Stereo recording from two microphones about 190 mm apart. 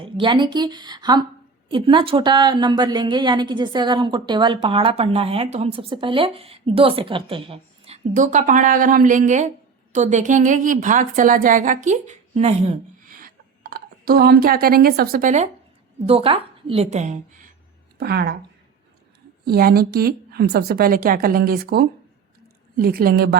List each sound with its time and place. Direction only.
0.0 s a woman's voice: 25° right (ahead or behind); by 15.4 s 40° right (ahead or behind)
16.0 s a woman's voice: 30° right (ahead or behind)
18.0 s speech: 60° right (ahead or behind)
19.5 s a woman's voice: 55° right (ahead or behind)